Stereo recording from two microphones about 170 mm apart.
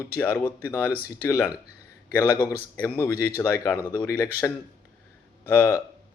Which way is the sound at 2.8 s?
10° left (ahead or behind).